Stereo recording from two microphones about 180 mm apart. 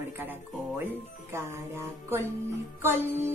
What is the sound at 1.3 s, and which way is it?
Music, 15° right (ahead or behind).